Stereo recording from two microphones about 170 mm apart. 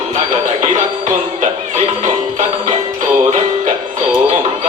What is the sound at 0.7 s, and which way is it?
Music, 45° right (ahead or behind).